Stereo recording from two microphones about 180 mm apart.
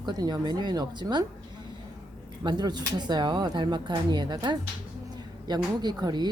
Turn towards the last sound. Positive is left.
turn(degrees=-20)  # may be behind; listen again after turning